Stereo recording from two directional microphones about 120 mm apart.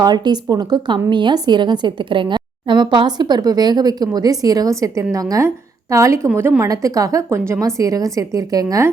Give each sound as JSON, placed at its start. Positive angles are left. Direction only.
{"t": 0.0, "sound": "a woman's voice", "side_deg": -35}